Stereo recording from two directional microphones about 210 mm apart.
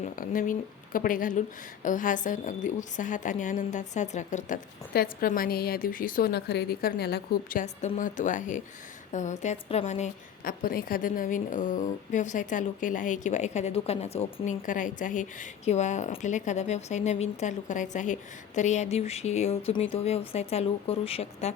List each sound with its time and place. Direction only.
0.0 s a woman's voice: 40° left (ahead or behind)
7.6 s a woman's voice: 35° left (ahead or behind)